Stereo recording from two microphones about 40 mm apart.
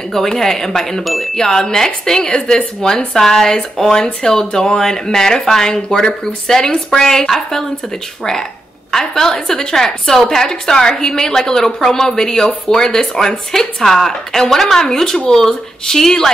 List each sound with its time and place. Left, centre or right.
0.1 s speech: centre
1.3 s speech: centre
8.9 s speech: centre